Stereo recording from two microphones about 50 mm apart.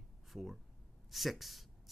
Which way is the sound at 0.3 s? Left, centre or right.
Centre.